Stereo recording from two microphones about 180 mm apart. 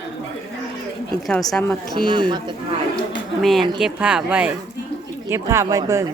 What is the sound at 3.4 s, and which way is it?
A woman's voice, centre (ahead or behind).